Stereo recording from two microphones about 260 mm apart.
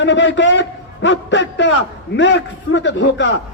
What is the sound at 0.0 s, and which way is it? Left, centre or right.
A man's voice, left.